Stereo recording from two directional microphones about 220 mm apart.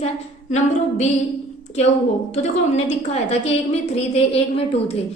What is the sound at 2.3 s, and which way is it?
A woman's voice, 30° left (ahead or behind).